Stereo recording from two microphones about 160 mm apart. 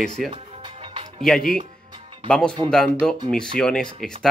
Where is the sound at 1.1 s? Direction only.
5° left (ahead or behind).